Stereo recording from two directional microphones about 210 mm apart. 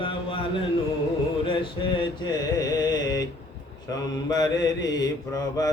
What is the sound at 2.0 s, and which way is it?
Mantra, 20° left (ahead or behind).